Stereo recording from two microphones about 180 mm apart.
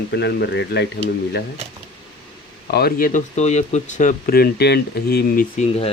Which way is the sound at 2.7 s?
60° left (ahead or behind).